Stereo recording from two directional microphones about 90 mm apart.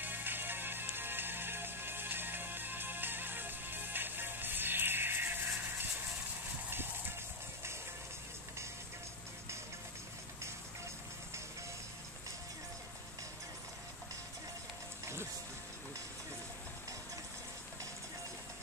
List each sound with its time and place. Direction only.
0.0 s music: 20° right (ahead or behind)
6.7 s clip-clop: 25° right (ahead or behind)